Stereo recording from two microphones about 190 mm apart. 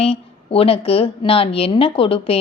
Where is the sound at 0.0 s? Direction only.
30° left (ahead or behind).